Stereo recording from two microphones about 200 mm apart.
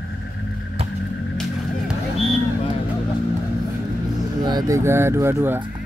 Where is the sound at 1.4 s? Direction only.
Centre (ahead or behind).